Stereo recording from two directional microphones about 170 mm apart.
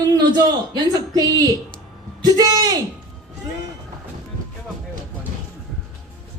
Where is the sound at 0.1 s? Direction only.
25° right (ahead or behind).